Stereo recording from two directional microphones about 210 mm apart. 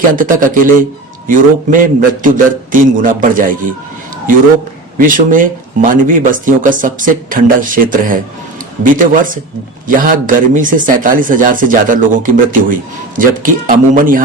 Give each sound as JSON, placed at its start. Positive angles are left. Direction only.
{"t": 0.2, "sound": "speech", "side_deg": -40}
{"t": 4.9, "sound": "speech", "side_deg": -40}